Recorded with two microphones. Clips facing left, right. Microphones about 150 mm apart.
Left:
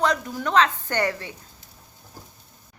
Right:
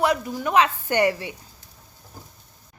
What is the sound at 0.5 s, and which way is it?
Speech, 10° right (ahead or behind).